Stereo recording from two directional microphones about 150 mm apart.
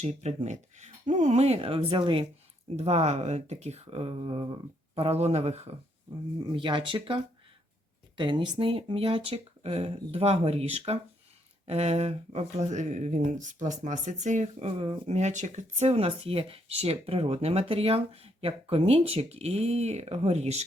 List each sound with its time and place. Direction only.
0.0 s speech: 50° right (ahead or behind)
2.7 s speech: 45° right (ahead or behind)
6.5 s speech: 30° right (ahead or behind)